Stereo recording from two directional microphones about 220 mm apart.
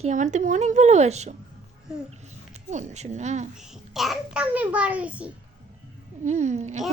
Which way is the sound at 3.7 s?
Centre (ahead or behind).